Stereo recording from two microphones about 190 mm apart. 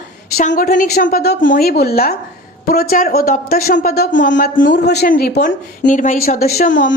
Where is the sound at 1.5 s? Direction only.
55° left (ahead or behind).